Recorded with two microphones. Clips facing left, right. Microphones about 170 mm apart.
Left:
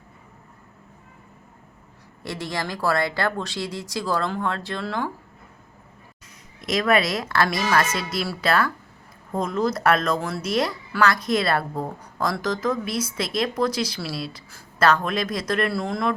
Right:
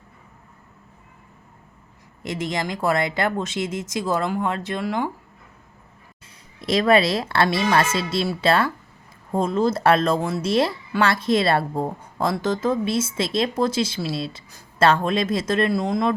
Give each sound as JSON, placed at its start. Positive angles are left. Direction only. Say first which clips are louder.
{"t": 2.2, "sound": "speech", "louder": "right 3 dB", "side_deg": -20}
{"t": 6.6, "sound": "speech", "louder": "right 3 dB", "side_deg": -30}